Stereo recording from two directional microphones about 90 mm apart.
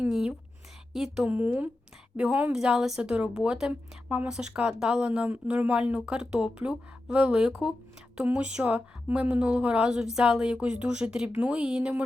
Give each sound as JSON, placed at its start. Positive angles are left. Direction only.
{"t": 0.0, "sound": "a woman's voice", "side_deg": -10}